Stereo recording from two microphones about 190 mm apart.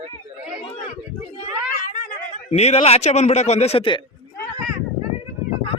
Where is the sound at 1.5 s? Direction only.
40° left (ahead or behind).